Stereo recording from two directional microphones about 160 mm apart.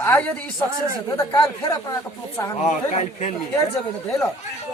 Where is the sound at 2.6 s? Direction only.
40° left (ahead or behind).